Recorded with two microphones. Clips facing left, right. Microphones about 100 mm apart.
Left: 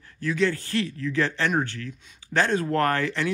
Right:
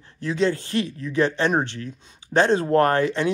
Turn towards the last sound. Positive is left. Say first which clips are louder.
# right 5 dB
turn(degrees=-20)  # may be behind; listen again after turning